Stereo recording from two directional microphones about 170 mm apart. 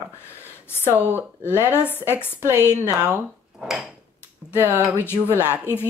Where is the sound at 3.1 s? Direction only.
5° right (ahead or behind).